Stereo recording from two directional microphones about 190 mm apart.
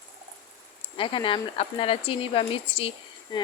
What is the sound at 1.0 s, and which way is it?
Speech, 25° left (ahead or behind).